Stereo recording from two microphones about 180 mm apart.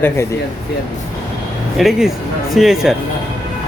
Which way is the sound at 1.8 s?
Centre (ahead or behind).